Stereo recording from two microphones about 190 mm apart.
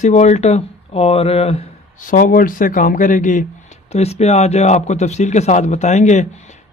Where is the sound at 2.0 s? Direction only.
45° left (ahead or behind).